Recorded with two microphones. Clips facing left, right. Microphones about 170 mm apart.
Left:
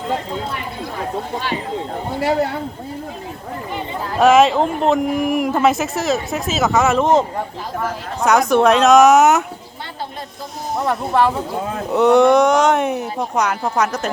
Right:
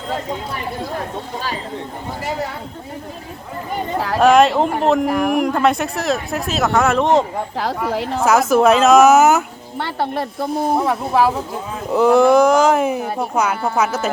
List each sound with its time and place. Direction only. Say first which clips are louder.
3.9 s speech: right 8 dB; 75° right (ahead or behind)
4.2 s speech: even; centre (ahead or behind)
5.0 s speech: right 1 dB; 70° right (ahead or behind)
5.3 s speech: even; 5° left (ahead or behind)
9.8 s speech: right 9 dB; 65° right (ahead or behind)
10.8 s speech: left 3 dB; centre (ahead or behind)